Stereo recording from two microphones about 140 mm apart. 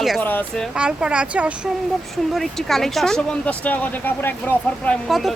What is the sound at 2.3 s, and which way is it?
Speech, centre (ahead or behind).